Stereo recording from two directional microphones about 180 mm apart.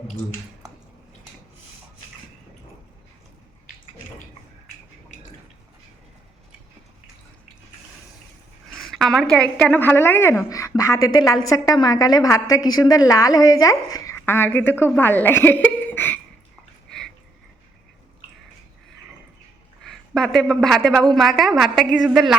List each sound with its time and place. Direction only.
8.8 s a woman's voice: centre (ahead or behind)
19.8 s a woman's voice: centre (ahead or behind)